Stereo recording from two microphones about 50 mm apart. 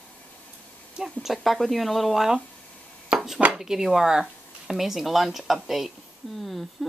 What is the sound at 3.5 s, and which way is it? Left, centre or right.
Speech, centre.